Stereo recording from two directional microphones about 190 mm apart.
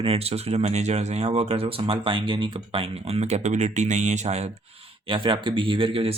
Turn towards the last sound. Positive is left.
turn(degrees=-30)  # may be behind; listen again after turning